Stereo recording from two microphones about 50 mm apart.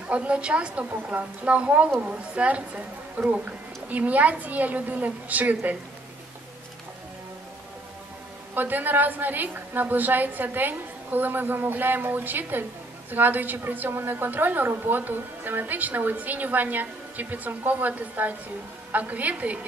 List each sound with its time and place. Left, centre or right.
0.1 s a woman's voice: right
8.5 s a woman's voice: right